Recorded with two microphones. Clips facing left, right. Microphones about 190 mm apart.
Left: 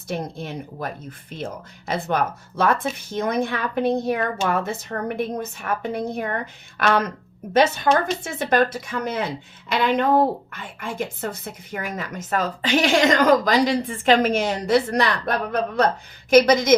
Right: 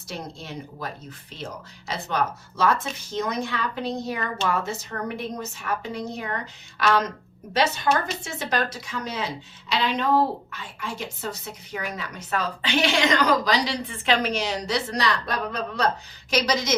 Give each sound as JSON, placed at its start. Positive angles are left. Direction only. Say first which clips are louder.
{"t": 0.1, "sound": "a woman's voice", "louder": "left 6 dB", "side_deg": 55}
{"t": 8.2, "sound": "a woman's voice", "louder": "left 7 dB", "side_deg": 55}